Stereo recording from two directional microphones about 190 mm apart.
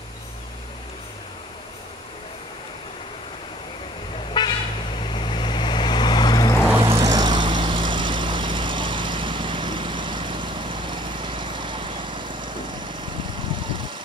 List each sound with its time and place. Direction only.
4.4 s vehicle: 20° left (ahead or behind)
6.8 s vehicle: 20° right (ahead or behind)